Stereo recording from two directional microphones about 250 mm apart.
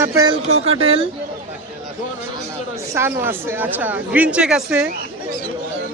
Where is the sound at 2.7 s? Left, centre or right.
Centre.